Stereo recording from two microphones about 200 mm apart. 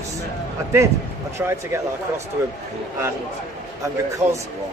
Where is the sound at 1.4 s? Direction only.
15° right (ahead or behind).